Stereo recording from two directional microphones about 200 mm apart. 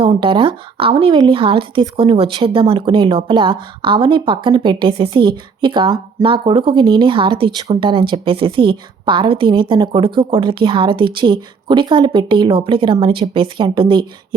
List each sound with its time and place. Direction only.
0.0 s a woman's voice: 25° right (ahead or behind)